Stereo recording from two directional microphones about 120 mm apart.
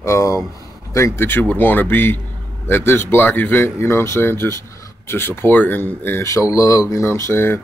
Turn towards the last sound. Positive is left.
turn(degrees=20)  # may be behind; listen again after turning